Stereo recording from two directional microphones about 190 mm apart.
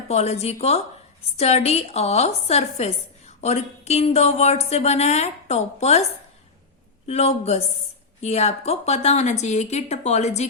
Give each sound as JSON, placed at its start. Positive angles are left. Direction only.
{"t": 0.1, "sound": "a woman's voice", "side_deg": 35}
{"t": 7.1, "sound": "a woman's voice", "side_deg": 35}